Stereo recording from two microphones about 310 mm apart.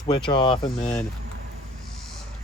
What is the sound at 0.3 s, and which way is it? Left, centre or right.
Speech, centre.